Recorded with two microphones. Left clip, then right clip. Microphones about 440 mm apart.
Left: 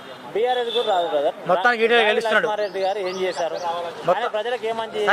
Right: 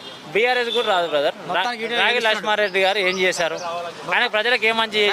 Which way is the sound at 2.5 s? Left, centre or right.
Right.